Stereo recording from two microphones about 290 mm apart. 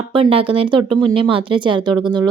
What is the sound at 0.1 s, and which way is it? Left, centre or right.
Speech, centre.